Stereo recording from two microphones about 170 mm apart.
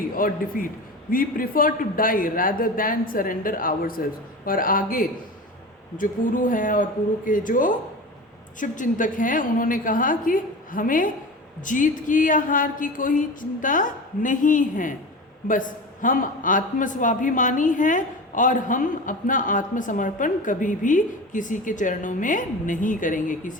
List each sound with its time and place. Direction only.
0.0 s a man's voice: 55° left (ahead or behind)